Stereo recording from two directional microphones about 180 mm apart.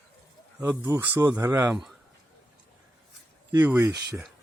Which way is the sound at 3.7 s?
15° right (ahead or behind).